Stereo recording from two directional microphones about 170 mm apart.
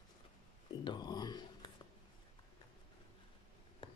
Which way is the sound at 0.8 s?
25° left (ahead or behind).